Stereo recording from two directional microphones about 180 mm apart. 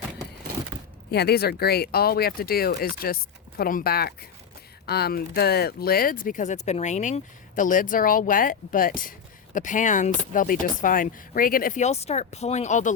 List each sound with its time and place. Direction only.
1.1 s speech: 65° left (ahead or behind); by 12.9 s 40° left (ahead or behind)